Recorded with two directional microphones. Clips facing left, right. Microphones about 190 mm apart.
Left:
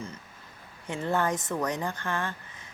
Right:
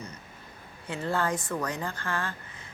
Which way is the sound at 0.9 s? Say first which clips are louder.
Left 1 dB; 20° left (ahead or behind).